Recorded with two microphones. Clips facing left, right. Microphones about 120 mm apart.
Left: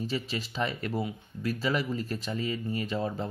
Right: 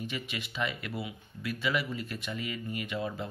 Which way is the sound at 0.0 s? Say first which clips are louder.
Left 5 dB; 35° left (ahead or behind).